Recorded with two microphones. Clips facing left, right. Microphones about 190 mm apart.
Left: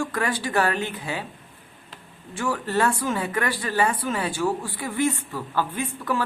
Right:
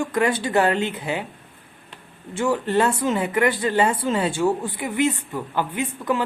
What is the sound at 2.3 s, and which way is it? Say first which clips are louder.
Speech: right 5 dB; 25° right (ahead or behind).